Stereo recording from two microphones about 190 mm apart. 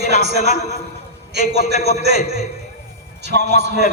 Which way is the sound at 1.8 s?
60° right (ahead or behind).